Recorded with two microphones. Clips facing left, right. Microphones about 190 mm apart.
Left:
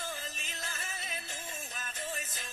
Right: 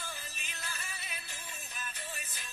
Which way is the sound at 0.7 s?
45° left (ahead or behind).